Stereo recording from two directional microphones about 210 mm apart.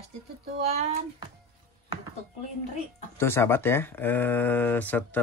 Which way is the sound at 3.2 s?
10° left (ahead or behind).